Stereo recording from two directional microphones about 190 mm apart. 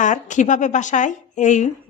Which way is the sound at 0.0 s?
40° left (ahead or behind).